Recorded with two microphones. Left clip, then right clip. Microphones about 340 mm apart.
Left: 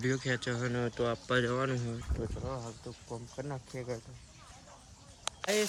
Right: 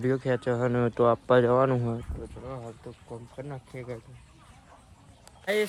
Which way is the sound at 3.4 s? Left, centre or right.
Centre.